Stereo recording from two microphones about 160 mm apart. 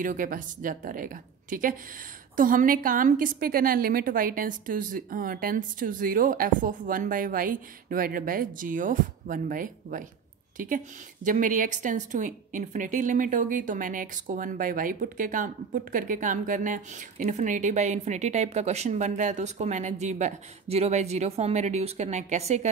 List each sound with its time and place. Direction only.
0.0 s a woman's voice: 55° right (ahead or behind)